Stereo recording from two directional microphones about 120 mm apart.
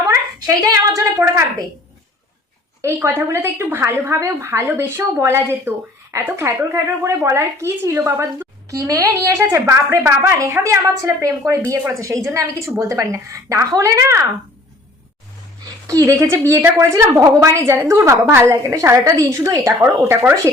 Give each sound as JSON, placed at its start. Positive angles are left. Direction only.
{"t": 0.1, "sound": "a woman's voice", "side_deg": -25}
{"t": 2.8, "sound": "a woman's voice", "side_deg": -20}
{"t": 15.6, "sound": "a woman's voice", "side_deg": -30}